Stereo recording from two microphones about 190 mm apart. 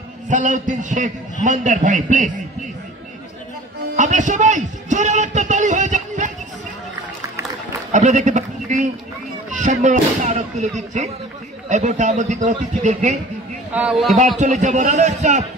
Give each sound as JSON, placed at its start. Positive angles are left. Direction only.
{"t": 0.3, "sound": "a man's voice", "side_deg": -40}
{"t": 3.9, "sound": "a man's voice", "side_deg": -40}
{"t": 7.9, "sound": "a man's voice", "side_deg": -40}
{"t": 13.7, "sound": "a man's voice", "side_deg": -5}
{"t": 14.4, "sound": "a man's voice", "side_deg": -40}